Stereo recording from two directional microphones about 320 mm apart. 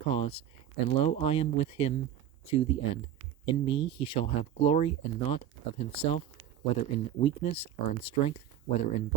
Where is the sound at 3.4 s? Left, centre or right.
Centre.